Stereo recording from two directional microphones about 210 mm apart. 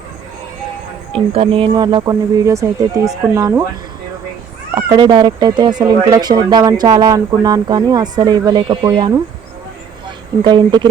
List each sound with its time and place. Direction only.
1.1 s speech: 25° right (ahead or behind)
4.7 s speech: 20° right (ahead or behind)
10.4 s speech: 20° right (ahead or behind)